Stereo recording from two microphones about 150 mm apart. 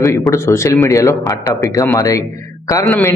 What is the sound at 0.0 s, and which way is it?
A man's voice, 20° left (ahead or behind).